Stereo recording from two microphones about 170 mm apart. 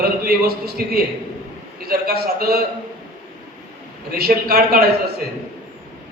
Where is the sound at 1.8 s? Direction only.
65° right (ahead or behind).